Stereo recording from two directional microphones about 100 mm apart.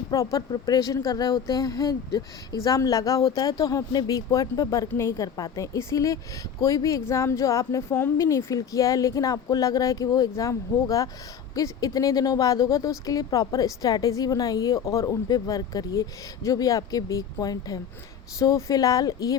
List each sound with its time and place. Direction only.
0.1 s speech: 35° left (ahead or behind)